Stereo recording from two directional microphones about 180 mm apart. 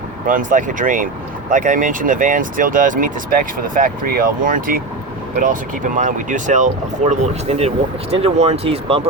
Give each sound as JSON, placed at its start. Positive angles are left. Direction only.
{"t": 0.3, "sound": "speech", "side_deg": -50}